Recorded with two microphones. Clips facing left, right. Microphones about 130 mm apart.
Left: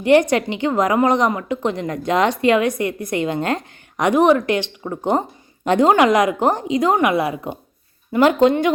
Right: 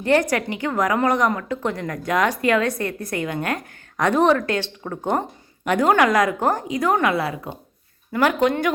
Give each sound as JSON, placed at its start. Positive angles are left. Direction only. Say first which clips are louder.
{"t": 0.0, "sound": "a woman's voice", "louder": "left 5 dB", "side_deg": 20}